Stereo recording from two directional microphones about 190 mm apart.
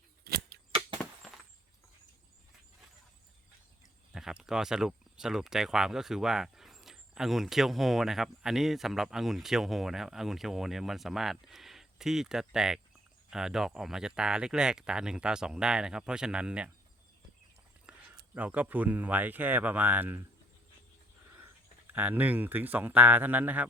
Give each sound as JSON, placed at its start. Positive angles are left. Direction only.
{"t": 0.3, "sound": "scissors", "side_deg": -55}
{"t": 4.1, "sound": "speech", "side_deg": -5}
{"t": 17.9, "sound": "a sound", "side_deg": -5}
{"t": 18.3, "sound": "speech", "side_deg": -10}
{"t": 21.9, "sound": "speech", "side_deg": -10}